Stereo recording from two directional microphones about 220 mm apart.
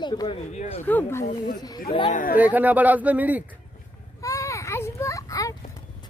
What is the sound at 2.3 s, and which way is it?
A man's voice, 5° right (ahead or behind).